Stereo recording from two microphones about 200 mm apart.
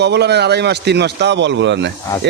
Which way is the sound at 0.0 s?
55° right (ahead or behind).